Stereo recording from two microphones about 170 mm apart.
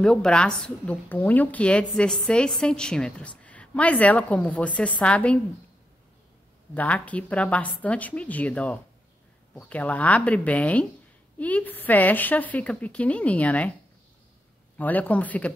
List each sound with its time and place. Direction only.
0.0 s a woman's voice: 5° left (ahead or behind)
6.7 s a woman's voice: 10° left (ahead or behind)
14.8 s a woman's voice: 10° left (ahead or behind)